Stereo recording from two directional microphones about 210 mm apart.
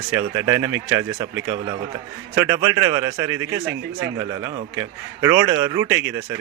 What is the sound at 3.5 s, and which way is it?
Speech, 60° right (ahead or behind).